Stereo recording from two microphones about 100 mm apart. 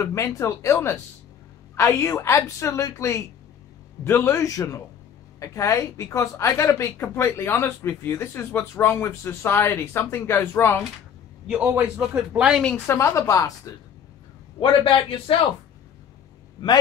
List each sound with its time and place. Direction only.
0.0 s a woman's voice: 30° left (ahead or behind)
11.4 s a man's voice: 15° right (ahead or behind)
12.3 s a man's voice: 10° right (ahead or behind)
12.7 s a woman's voice: 25° left (ahead or behind)
14.6 s a man's voice: 60° left (ahead or behind)